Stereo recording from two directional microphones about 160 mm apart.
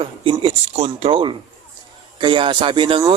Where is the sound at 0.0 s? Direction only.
35° right (ahead or behind).